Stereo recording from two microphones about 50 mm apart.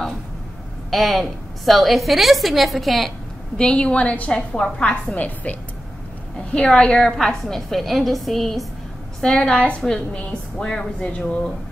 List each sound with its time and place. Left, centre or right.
0.8 s a woman's voice: centre
3.5 s a woman's voice: centre
9.2 s a woman's voice: centre